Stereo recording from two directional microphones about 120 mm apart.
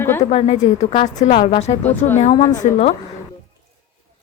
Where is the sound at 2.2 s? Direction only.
65° left (ahead or behind).